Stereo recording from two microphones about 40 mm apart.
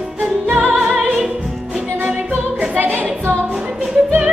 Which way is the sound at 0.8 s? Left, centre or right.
Right.